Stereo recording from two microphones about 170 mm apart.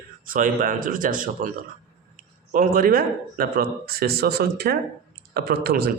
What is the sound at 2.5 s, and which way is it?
A man's voice, 55° right (ahead or behind).